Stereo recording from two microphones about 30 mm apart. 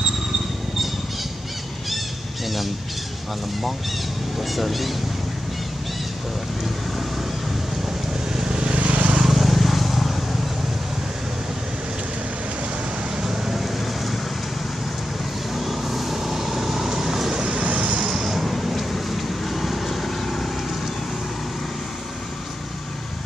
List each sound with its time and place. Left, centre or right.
4.4 s speech: centre
8.5 s vehicle: right
8.7 s vehicle: right
9.2 s vehicle: centre
13.2 s vehicle: centre
13.6 s vehicle: centre
15.5 s vehicle: centre
17.4 s vehicle: right
18.3 s vehicle: centre